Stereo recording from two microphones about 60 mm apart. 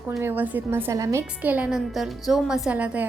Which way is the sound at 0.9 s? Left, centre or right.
Right.